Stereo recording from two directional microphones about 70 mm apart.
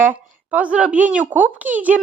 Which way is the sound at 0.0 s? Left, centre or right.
Right.